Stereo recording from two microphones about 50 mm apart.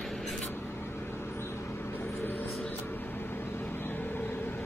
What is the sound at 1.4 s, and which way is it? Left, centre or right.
Vehicle, left.